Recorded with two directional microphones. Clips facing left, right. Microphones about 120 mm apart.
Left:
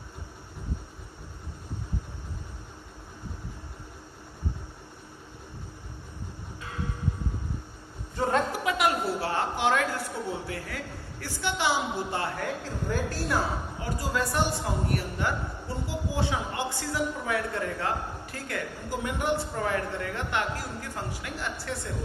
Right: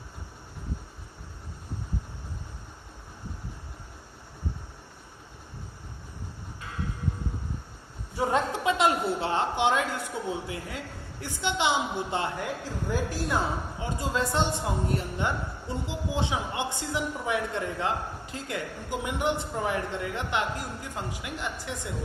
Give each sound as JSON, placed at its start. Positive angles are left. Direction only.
{"t": 8.1, "sound": "speech", "side_deg": -15}